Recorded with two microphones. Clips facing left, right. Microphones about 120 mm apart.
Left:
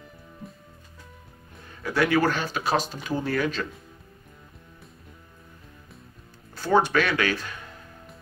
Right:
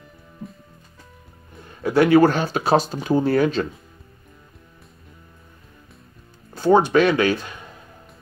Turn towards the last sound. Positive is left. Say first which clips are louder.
# right 7 dB
turn(degrees=-20)  # may be behind; listen again after turning